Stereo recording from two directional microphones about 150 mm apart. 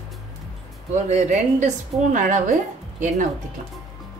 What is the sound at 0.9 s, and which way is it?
A woman's voice, 50° right (ahead or behind).